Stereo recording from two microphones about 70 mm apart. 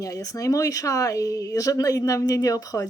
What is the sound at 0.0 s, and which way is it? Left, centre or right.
Speech, left.